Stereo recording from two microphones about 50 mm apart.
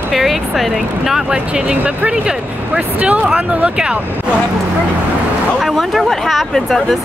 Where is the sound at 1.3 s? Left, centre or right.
Centre.